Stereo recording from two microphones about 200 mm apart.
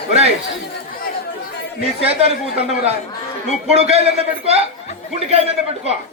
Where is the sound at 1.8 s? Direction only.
30° right (ahead or behind).